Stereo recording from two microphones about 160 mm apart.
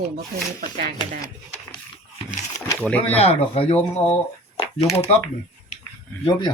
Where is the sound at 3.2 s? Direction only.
40° left (ahead or behind).